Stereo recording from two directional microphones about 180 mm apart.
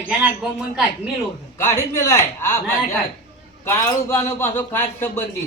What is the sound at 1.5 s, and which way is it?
Speech, 15° left (ahead or behind).